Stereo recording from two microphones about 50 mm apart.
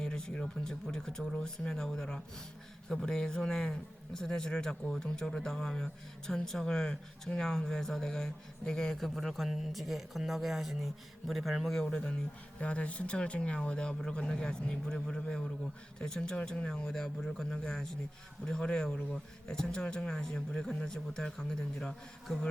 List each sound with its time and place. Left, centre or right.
0.0 s a man's voice: centre
9.0 s speech: centre
11.8 s a man's voice: centre